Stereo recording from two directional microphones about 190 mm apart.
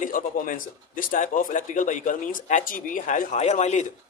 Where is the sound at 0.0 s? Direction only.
45° left (ahead or behind).